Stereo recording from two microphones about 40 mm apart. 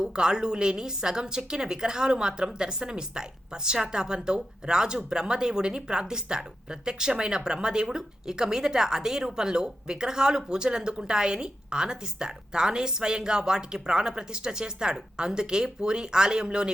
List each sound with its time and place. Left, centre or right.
0.0 s a woman's voice: centre